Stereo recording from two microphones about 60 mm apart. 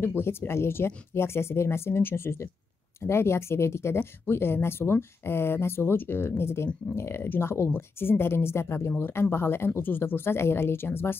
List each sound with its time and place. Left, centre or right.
0.0 s speech: left